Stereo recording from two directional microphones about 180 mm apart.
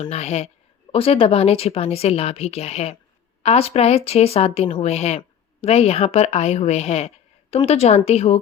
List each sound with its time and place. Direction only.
0.0 s speech: 40° left (ahead or behind)